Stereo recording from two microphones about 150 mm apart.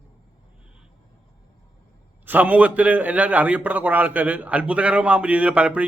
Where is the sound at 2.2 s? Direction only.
10° right (ahead or behind).